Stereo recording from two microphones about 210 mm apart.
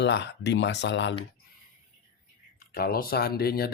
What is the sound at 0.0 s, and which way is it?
Speech, 55° left (ahead or behind).